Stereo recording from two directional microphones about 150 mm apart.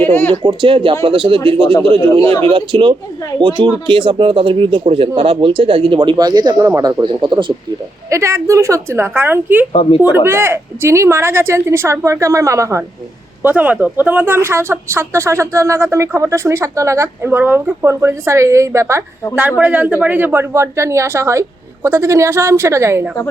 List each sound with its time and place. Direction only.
0.0 s speech: 15° left (ahead or behind)
0.4 s speech: 35° right (ahead or behind)
8.1 s speech: 20° right (ahead or behind)